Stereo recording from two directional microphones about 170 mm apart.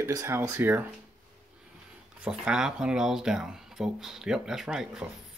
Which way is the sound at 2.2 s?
5° right (ahead or behind).